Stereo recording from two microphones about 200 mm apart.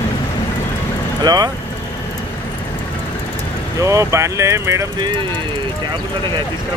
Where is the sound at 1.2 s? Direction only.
20° right (ahead or behind).